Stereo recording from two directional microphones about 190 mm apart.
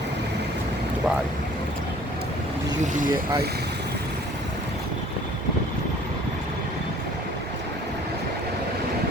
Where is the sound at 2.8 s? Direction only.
40° right (ahead or behind).